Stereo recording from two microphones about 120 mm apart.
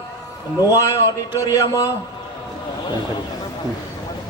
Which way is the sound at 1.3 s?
30° left (ahead or behind).